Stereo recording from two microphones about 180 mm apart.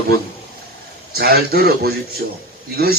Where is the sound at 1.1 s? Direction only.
60° right (ahead or behind).